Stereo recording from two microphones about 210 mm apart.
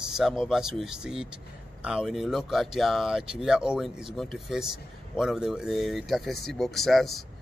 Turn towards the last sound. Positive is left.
turn(degrees=0)  # may be behind; listen again after turning